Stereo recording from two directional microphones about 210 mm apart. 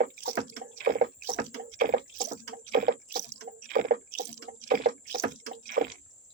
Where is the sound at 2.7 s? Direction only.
45° right (ahead or behind).